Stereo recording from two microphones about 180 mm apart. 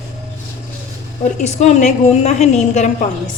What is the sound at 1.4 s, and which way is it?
A woman's voice, 40° left (ahead or behind).